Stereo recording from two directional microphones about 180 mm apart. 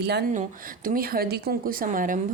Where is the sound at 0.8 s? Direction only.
55° right (ahead or behind).